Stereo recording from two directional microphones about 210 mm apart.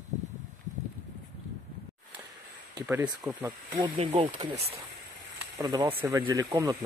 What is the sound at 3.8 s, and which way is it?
Speech, 25° right (ahead or behind).